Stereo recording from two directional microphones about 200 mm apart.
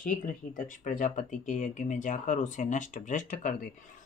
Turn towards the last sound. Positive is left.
turn(degrees=40)  # may be behind; listen again after turning